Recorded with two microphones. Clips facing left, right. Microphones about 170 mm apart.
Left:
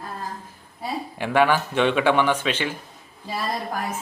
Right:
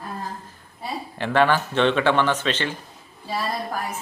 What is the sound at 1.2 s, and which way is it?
Speech, 10° left (ahead or behind).